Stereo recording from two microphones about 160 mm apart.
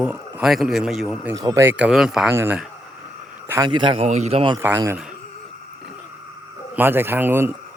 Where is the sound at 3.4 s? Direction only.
15° right (ahead or behind).